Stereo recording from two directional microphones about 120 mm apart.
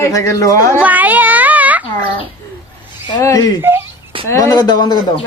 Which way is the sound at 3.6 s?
20° right (ahead or behind).